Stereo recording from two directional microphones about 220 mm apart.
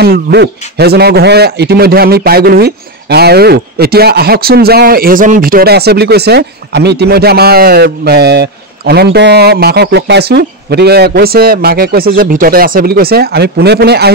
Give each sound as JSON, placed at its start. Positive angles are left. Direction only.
{"t": 0.0, "sound": "a man's voice", "side_deg": -50}